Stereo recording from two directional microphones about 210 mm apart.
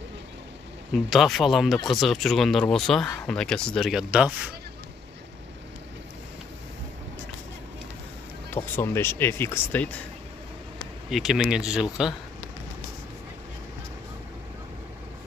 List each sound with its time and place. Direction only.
0.9 s speech: centre (ahead or behind)
8.5 s speech: 10° left (ahead or behind)
11.1 s speech: centre (ahead or behind)